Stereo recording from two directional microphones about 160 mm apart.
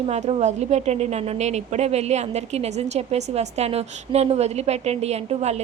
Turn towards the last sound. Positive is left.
turn(degrees=-40)  # may be behind; listen again after turning